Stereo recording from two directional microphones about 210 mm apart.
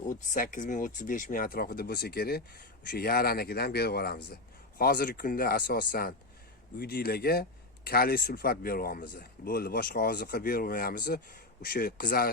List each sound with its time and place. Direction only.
0.1 s speech: 40° left (ahead or behind)